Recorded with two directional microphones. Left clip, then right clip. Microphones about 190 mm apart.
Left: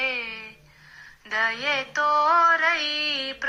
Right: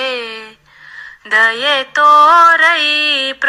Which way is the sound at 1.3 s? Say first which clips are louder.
Right 13 dB; 35° right (ahead or behind).